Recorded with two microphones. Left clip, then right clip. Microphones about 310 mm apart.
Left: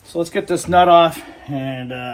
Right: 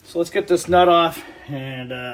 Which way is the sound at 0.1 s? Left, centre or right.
Left.